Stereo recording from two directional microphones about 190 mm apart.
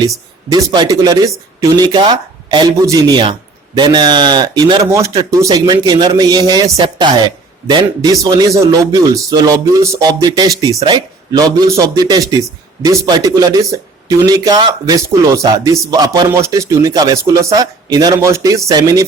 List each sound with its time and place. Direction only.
0.5 s speech: 20° right (ahead or behind)